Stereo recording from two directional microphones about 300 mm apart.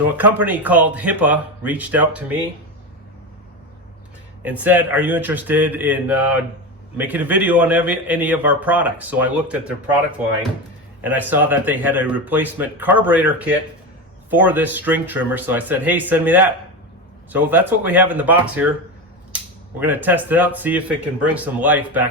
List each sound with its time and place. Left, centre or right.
0.2 s a man's voice: centre
4.4 s a man's voice: centre
11.0 s a man's voice: centre
19.8 s a man's voice: centre